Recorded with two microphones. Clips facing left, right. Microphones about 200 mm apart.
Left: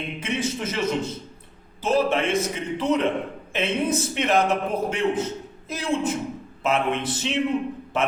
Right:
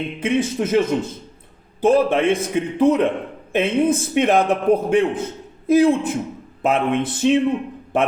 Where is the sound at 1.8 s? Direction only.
55° right (ahead or behind).